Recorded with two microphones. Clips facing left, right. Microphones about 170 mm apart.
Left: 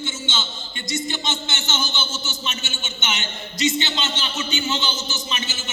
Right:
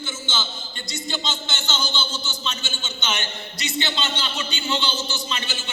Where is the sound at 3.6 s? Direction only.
20° left (ahead or behind).